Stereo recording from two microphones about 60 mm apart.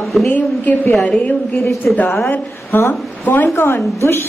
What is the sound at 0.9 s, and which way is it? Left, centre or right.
Speech, centre.